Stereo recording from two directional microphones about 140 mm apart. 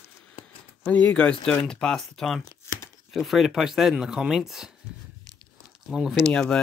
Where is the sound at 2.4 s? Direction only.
20° left (ahead or behind).